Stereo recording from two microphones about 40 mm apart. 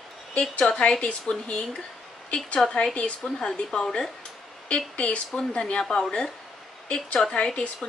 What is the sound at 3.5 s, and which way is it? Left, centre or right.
Speech, centre.